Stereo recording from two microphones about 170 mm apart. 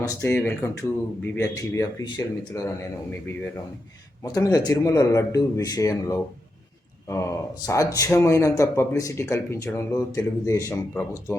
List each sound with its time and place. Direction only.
0.0 s a man's voice: 15° left (ahead or behind)
4.2 s a man's voice: 20° left (ahead or behind)